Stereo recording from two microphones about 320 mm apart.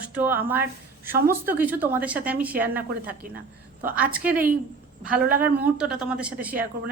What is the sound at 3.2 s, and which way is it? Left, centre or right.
Speech, right.